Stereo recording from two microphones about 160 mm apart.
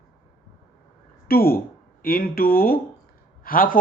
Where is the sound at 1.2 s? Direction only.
70° left (ahead or behind).